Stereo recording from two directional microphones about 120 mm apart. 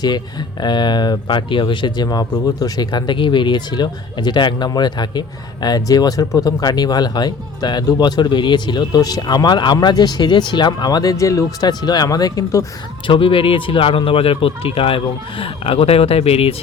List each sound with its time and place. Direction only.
0.6 s speech: 35° left (ahead or behind)
13.1 s speech: 45° left (ahead or behind)